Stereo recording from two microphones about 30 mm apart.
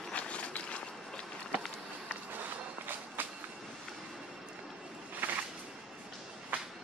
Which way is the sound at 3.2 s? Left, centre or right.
Right.